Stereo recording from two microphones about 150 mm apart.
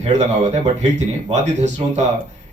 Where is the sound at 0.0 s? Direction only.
50° right (ahead or behind).